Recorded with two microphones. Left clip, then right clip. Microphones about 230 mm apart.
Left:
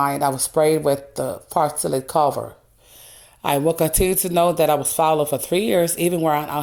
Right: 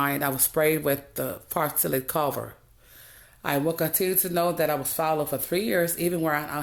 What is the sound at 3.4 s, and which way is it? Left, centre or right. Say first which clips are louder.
Speech: left 7 dB; left.